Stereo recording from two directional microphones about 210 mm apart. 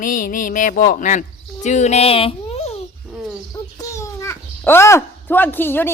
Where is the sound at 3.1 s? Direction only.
Centre (ahead or behind).